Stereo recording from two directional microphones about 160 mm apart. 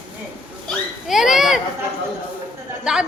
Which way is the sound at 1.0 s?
Centre (ahead or behind).